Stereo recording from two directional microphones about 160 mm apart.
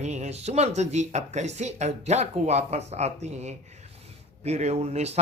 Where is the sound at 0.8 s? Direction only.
45° right (ahead or behind).